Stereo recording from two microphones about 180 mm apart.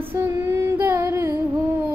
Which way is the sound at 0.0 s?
15° right (ahead or behind).